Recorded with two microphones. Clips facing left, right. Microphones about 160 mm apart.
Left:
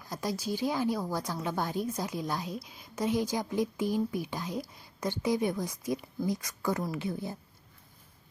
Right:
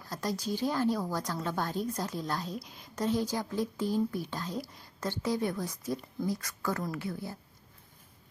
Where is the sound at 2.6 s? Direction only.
Centre (ahead or behind).